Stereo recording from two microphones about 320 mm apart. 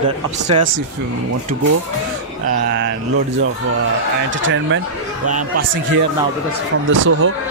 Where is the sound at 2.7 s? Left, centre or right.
Right.